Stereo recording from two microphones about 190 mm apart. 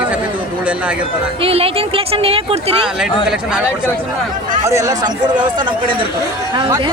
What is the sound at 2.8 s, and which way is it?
Speech, 5° right (ahead or behind).